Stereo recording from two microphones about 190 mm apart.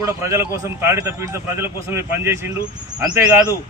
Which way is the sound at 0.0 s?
15° right (ahead or behind).